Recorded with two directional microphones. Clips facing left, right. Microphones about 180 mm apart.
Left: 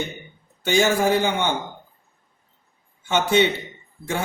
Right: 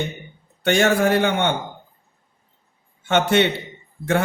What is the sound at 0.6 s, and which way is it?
Speech, 65° right (ahead or behind).